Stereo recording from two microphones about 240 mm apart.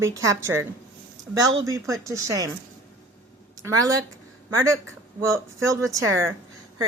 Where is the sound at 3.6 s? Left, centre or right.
Centre.